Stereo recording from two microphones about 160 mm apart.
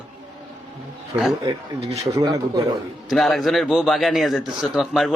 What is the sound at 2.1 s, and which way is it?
Speech, 25° right (ahead or behind).